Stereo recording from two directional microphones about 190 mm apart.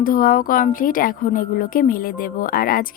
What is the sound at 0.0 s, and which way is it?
A woman's voice, 45° left (ahead or behind).